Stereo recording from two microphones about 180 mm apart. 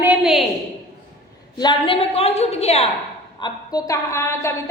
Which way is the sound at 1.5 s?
25° left (ahead or behind).